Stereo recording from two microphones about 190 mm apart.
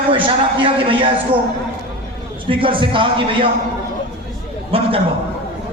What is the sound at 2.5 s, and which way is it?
A man's voice, 25° right (ahead or behind).